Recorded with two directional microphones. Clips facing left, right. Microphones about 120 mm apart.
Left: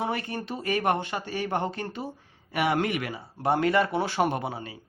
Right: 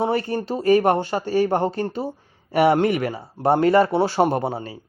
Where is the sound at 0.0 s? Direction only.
35° right (ahead or behind).